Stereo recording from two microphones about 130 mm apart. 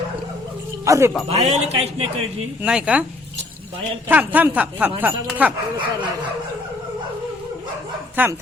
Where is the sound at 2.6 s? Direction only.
10° right (ahead or behind).